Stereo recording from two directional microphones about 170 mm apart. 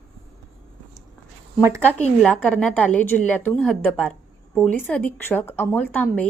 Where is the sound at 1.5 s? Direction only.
15° right (ahead or behind).